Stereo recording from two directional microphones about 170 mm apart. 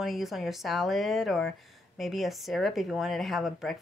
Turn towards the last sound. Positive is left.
turn(degrees=0)  # may be behind; listen again after turning